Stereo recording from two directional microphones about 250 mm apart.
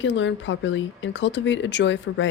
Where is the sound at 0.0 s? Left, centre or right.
Left.